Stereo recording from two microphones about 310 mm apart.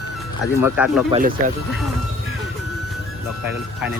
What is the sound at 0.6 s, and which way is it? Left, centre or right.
Speech, centre.